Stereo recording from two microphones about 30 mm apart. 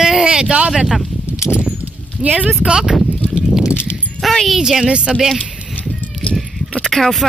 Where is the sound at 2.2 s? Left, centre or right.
Right.